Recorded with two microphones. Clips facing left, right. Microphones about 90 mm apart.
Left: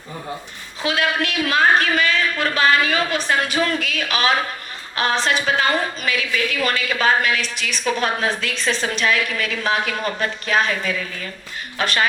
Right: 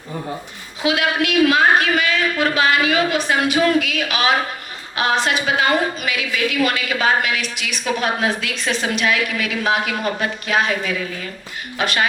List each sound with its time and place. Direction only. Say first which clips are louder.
0.8 s a woman's voice: right 2 dB; 35° left (ahead or behind)